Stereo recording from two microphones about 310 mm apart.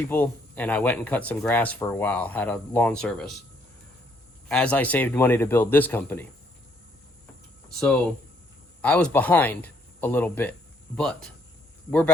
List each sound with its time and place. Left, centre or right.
0.1 s speech: centre
4.4 s a man's voice: centre
8.8 s speech: centre